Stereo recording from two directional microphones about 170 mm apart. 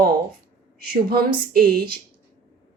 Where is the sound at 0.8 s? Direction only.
60° right (ahead or behind).